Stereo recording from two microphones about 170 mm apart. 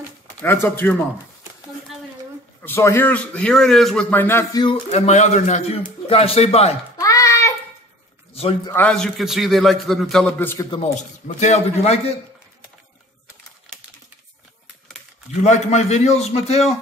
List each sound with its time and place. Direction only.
0.4 s a man's voice: 10° left (ahead or behind)
2.6 s a man's voice: 15° left (ahead or behind)
4.6 s a man's voice: 40° left (ahead or behind)
7.0 s a sound: 20° left (ahead or behind)
8.7 s a man's voice: 5° left (ahead or behind)
10.8 s a man's voice: 45° left (ahead or behind)
15.4 s a man's voice: 40° left (ahead or behind)